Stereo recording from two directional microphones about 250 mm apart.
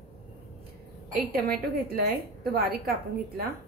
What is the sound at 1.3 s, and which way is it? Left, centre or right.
A woman's voice, right.